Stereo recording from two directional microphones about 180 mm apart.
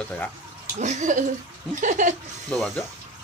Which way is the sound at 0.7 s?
40° right (ahead or behind).